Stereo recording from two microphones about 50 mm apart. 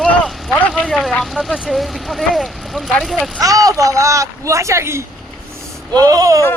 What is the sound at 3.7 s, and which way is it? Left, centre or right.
Speech, right.